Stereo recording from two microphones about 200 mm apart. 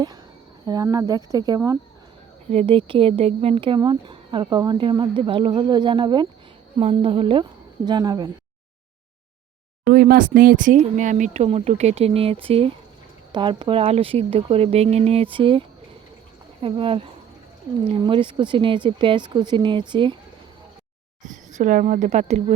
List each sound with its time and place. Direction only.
0.6 s speech: 20° right (ahead or behind)
2.5 s speech: 30° right (ahead or behind)
9.9 s speech: 45° right (ahead or behind); by 15.6 s 25° right (ahead or behind)
16.6 s speech: 25° right (ahead or behind)
21.5 s speech: 40° right (ahead or behind)